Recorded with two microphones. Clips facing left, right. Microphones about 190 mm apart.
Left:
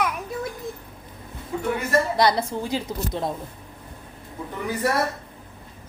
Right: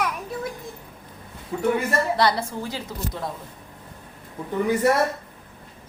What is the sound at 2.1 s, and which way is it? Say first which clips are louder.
A woman's voice: left 1 dB; 15° left (ahead or behind).